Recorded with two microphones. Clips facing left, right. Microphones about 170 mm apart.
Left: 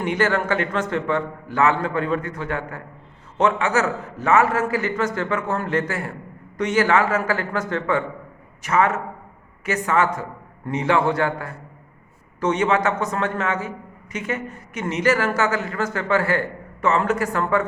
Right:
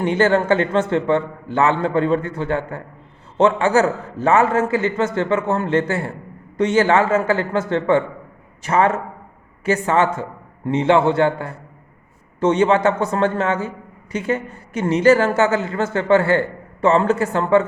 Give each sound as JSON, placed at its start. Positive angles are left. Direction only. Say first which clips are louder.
{"t": 0.0, "sound": "a man's voice", "louder": "right 5 dB", "side_deg": -30}